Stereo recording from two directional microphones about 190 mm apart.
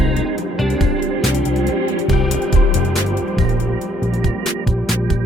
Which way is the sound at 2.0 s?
Centre (ahead or behind).